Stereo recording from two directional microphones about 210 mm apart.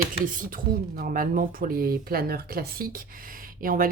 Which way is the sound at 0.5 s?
40° right (ahead or behind).